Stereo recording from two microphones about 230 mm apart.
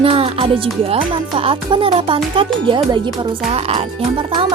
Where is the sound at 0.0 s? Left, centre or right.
Right.